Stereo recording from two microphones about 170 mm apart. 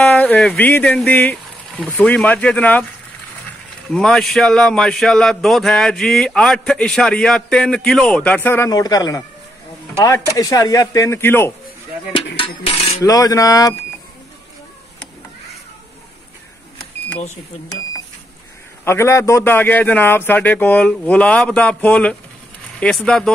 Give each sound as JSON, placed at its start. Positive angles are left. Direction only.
{"t": 0.0, "sound": "speech", "side_deg": 5}
{"t": 3.9, "sound": "a man's voice", "side_deg": 0}
{"t": 10.3, "sound": "speech", "side_deg": 20}
{"t": 13.0, "sound": "speech", "side_deg": 20}
{"t": 18.9, "sound": "a man's voice", "side_deg": 15}